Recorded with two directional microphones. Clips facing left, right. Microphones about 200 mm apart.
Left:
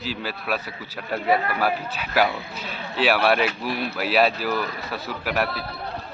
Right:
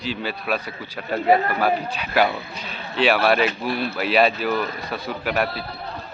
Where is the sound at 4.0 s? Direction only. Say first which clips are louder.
Right 1 dB; 5° left (ahead or behind).